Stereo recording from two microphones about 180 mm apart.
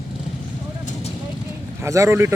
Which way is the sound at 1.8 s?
15° right (ahead or behind).